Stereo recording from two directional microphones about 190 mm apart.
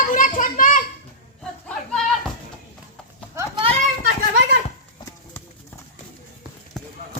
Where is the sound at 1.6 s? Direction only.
Centre (ahead or behind).